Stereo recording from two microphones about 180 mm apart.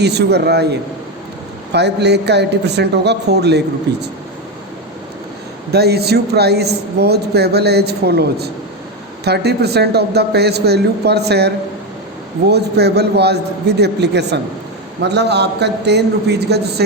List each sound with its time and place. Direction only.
0.0 s a man's voice: 65° right (ahead or behind)
5.7 s a man's voice: 65° right (ahead or behind)